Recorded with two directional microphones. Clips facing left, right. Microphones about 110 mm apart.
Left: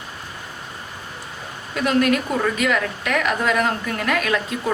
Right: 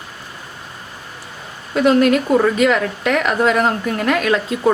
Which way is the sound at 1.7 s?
30° right (ahead or behind).